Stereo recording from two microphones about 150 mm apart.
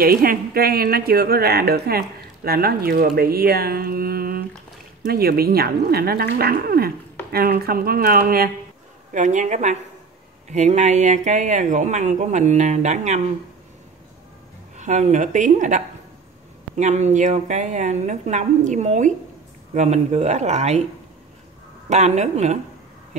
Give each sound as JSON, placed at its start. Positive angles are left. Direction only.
{"t": 0.0, "sound": "speech", "side_deg": -80}
{"t": 9.1, "sound": "speech", "side_deg": -55}
{"t": 14.8, "sound": "speech", "side_deg": -55}
{"t": 21.8, "sound": "speech", "side_deg": -50}